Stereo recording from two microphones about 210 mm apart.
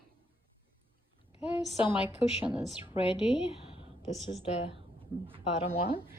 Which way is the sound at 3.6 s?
25° left (ahead or behind).